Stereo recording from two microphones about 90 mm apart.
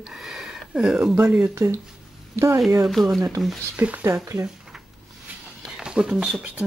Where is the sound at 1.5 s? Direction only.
30° right (ahead or behind).